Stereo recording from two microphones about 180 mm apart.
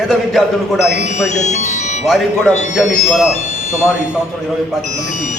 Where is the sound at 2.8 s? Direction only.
Centre (ahead or behind).